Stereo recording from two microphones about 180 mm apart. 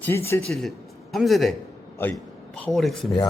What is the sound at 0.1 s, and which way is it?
Speech, 15° left (ahead or behind).